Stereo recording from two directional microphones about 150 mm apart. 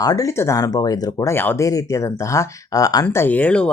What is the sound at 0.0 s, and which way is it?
Speech, 25° left (ahead or behind).